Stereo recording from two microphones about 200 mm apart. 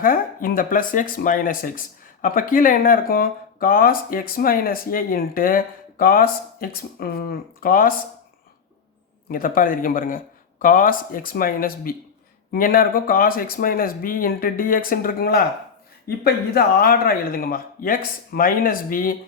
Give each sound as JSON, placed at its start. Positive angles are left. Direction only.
{"t": 0.0, "sound": "speech", "side_deg": 45}
{"t": 9.3, "sound": "speech", "side_deg": 45}